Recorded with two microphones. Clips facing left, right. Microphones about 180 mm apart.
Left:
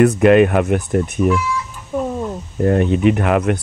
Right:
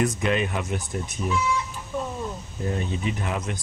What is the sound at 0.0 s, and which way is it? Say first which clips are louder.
Speech: left 13 dB; 65° left (ahead or behind).